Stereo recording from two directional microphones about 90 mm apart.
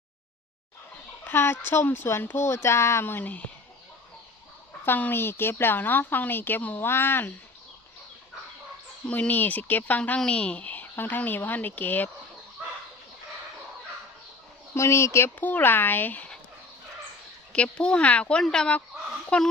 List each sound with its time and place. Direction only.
1.2 s a woman's voice: 25° left (ahead or behind)
4.9 s a woman's voice: 20° left (ahead or behind)
9.0 s a woman's voice: 15° left (ahead or behind)
14.8 s speech: 30° left (ahead or behind)
15.4 s a woman's voice: 20° left (ahead or behind)
17.5 s speech: 10° left (ahead or behind)